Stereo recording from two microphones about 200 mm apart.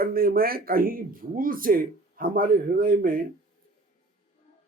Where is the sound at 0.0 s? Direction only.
45° right (ahead or behind).